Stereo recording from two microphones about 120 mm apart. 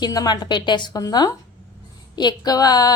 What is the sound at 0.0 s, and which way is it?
A woman's voice, 35° left (ahead or behind).